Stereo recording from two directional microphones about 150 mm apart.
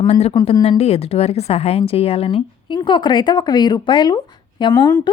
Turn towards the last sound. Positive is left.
turn(degrees=25)  # may be behind; listen again after turning